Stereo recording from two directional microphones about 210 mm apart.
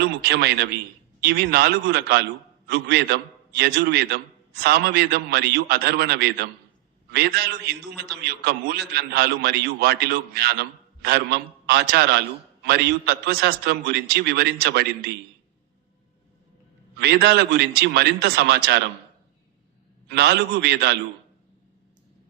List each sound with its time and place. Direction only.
0.2 s a man's voice: 50° right (ahead or behind)
17.0 s a man's voice: 50° right (ahead or behind)
20.1 s a man's voice: 50° right (ahead or behind)